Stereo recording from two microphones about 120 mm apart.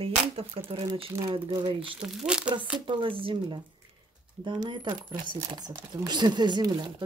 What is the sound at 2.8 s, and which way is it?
Speech, 45° right (ahead or behind).